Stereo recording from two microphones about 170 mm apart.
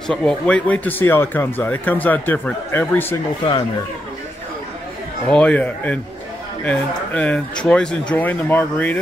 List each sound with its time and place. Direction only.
0.1 s speech: 5° left (ahead or behind)
5.3 s speech: 5° left (ahead or behind)